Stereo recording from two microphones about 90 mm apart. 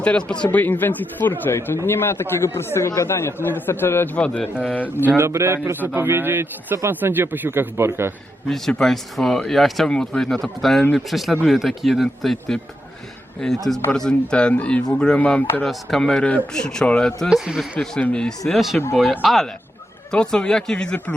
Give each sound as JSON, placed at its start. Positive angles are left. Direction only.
{"t": 0.0, "sound": "a man's voice", "side_deg": 10}
{"t": 0.5, "sound": "a man's voice", "side_deg": 20}
{"t": 4.9, "sound": "a man's voice", "side_deg": -25}
{"t": 8.4, "sound": "speech", "side_deg": 5}
{"t": 13.9, "sound": "a man's voice", "side_deg": 10}
{"t": 17.2, "sound": "a man's voice", "side_deg": -10}
{"t": 17.7, "sound": "a man's voice", "side_deg": 10}